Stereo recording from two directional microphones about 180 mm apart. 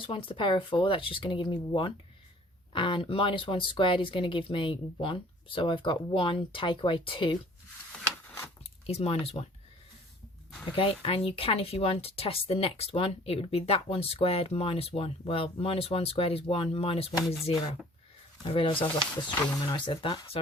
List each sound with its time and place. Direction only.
0.0 s speech: 30° left (ahead or behind)
8.9 s speech: 35° left (ahead or behind)
10.7 s speech: 30° left (ahead or behind)